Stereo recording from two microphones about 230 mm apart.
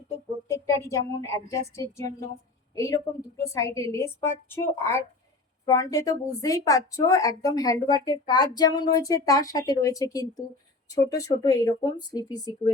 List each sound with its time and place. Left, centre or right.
0.4 s speech: centre